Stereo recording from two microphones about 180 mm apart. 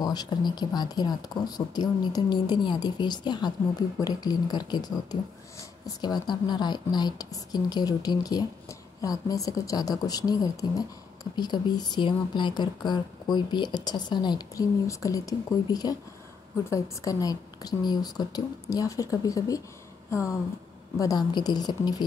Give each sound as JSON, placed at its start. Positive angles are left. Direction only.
{"t": 0.0, "sound": "a woman's voice", "side_deg": 25}
{"t": 21.0, "sound": "a woman's voice", "side_deg": 20}